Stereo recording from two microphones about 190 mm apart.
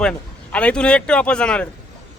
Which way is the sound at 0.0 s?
5° left (ahead or behind).